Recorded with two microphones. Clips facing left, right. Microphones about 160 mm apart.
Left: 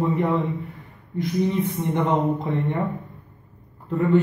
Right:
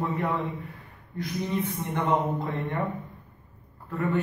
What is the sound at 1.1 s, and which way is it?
Speech, 20° left (ahead or behind).